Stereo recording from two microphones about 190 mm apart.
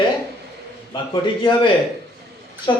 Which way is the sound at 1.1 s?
25° left (ahead or behind).